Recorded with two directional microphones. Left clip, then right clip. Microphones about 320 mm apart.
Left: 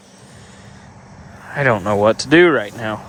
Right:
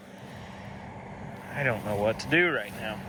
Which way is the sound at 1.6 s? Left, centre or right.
Left.